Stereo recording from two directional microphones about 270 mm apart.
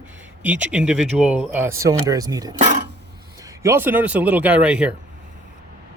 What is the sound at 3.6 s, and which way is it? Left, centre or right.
Speech, centre.